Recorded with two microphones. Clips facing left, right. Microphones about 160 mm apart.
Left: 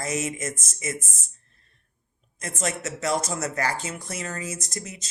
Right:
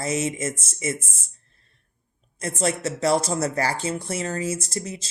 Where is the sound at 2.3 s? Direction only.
30° right (ahead or behind).